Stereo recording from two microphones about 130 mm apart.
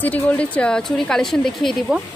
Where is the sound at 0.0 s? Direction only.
10° left (ahead or behind).